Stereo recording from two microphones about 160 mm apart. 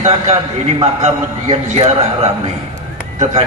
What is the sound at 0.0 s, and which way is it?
A man's voice, 40° right (ahead or behind).